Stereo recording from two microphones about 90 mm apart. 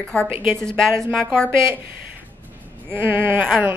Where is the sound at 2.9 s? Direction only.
25° right (ahead or behind).